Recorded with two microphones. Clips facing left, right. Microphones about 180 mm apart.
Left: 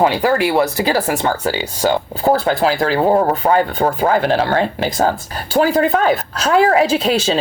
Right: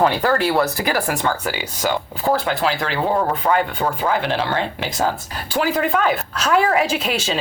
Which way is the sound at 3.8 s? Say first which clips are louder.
Left 5 dB; 45° left (ahead or behind).